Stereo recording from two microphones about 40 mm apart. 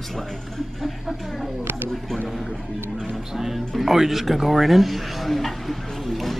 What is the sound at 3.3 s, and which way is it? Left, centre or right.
Speech, centre.